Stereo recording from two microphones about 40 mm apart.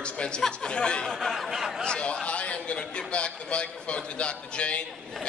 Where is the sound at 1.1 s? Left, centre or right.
Centre.